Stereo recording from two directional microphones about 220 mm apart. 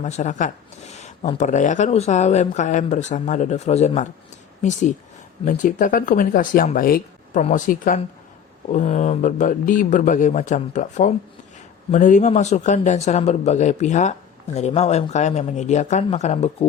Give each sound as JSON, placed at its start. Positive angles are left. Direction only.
{"t": 0.0, "sound": "speech", "side_deg": 35}